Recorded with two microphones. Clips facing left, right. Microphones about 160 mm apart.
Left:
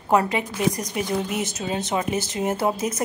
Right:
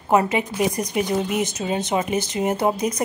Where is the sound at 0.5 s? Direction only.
15° right (ahead or behind).